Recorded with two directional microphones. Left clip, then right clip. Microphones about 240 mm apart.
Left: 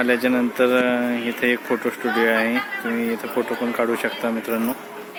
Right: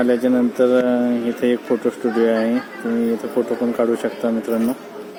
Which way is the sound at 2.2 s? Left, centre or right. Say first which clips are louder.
Right 1 dB; centre.